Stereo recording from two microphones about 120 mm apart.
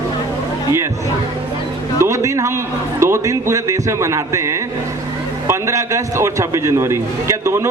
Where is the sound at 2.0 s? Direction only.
25° right (ahead or behind).